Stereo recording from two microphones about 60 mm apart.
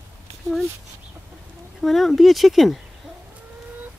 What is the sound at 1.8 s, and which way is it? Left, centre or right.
Speech, centre.